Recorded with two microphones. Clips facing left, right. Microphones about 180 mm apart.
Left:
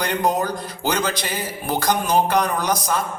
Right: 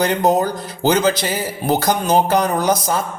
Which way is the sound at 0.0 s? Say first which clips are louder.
Right 5 dB; 25° right (ahead or behind).